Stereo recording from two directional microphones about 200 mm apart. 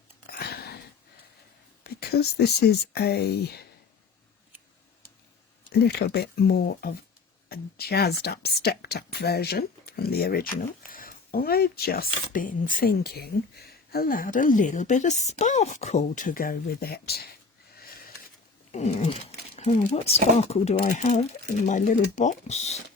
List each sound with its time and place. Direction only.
0.3 s sniff: 50° left (ahead or behind)
1.8 s speech: 50° left (ahead or behind)
5.8 s speech: 50° left (ahead or behind)
18.7 s speech: 35° left (ahead or behind)